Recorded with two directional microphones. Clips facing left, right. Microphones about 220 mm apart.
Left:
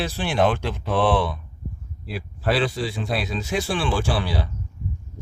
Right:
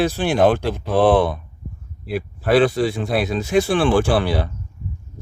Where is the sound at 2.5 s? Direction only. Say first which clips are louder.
Right 9 dB; 50° right (ahead or behind).